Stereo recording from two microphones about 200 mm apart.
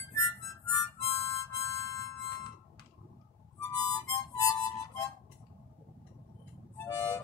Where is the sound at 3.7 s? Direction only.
15° left (ahead or behind).